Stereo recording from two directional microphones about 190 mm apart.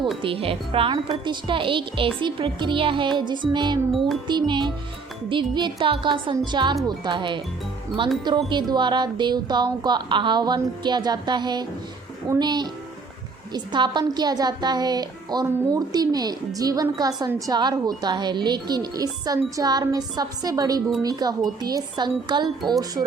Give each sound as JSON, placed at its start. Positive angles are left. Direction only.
{"t": 0.2, "sound": "a woman's voice", "side_deg": -30}
{"t": 8.4, "sound": "a woman's voice", "side_deg": -25}